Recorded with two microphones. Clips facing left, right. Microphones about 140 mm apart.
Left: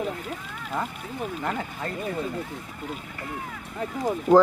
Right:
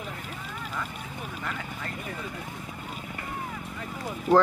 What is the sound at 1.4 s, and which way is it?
Speech, 40° left (ahead or behind).